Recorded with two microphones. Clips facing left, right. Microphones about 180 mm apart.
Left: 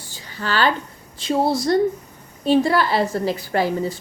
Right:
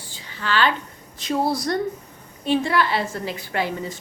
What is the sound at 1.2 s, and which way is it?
Speech, 25° left (ahead or behind).